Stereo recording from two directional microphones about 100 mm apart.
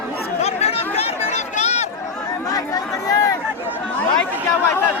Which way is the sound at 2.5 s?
35° left (ahead or behind).